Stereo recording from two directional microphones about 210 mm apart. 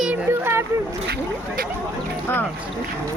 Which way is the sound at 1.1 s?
45° right (ahead or behind).